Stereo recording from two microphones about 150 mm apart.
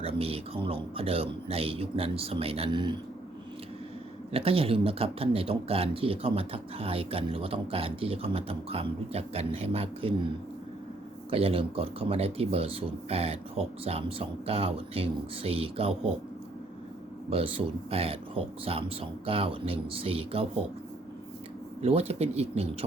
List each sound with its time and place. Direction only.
0.0 s speech: 40° right (ahead or behind)
4.3 s speech: 40° right (ahead or behind)
11.3 s speech: 40° right (ahead or behind)
17.2 s speech: 40° right (ahead or behind)
21.8 s speech: 40° right (ahead or behind)